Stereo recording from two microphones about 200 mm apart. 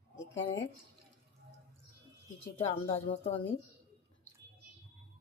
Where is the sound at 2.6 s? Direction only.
30° left (ahead or behind).